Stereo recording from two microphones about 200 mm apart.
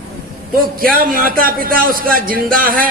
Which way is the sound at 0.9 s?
45° right (ahead or behind).